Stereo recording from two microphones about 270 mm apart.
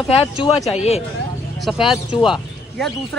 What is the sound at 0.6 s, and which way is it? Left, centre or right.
Speech, left.